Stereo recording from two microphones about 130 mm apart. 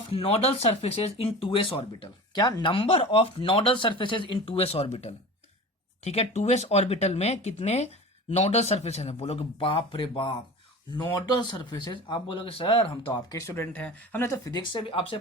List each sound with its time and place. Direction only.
0.1 s speech: 50° left (ahead or behind)
12.9 s speech: 25° left (ahead or behind)
14.4 s speech: 35° left (ahead or behind)